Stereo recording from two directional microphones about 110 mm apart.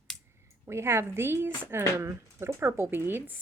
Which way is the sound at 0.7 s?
25° right (ahead or behind).